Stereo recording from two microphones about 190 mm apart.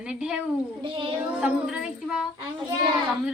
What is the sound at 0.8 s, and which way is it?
Speech, 30° right (ahead or behind).